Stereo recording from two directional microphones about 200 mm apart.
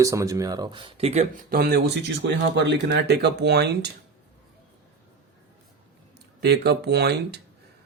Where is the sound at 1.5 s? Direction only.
50° right (ahead or behind).